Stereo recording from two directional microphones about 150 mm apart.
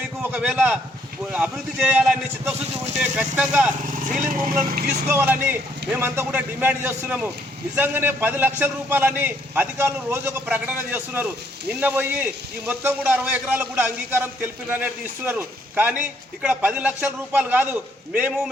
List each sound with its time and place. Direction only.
0.2 s a man's voice: 10° right (ahead or behind)
4.7 s speech: 90° right
5.0 s a man's voice: 15° right (ahead or behind)